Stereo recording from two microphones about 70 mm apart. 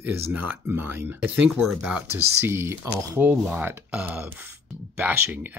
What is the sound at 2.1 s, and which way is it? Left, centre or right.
Speech, right.